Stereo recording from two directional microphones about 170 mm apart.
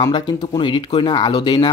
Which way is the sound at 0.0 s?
20° left (ahead or behind).